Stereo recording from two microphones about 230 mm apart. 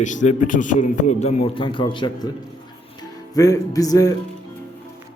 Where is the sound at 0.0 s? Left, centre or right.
Left.